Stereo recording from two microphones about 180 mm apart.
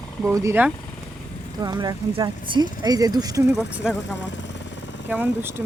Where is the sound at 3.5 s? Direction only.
5° right (ahead or behind).